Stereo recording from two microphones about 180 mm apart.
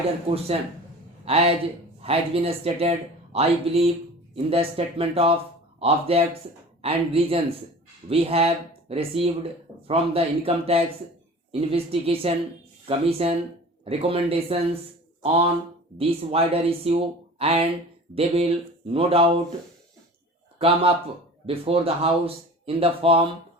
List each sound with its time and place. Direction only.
0.3 s a man's voice: 35° right (ahead or behind)
20.6 s speech: 35° right (ahead or behind)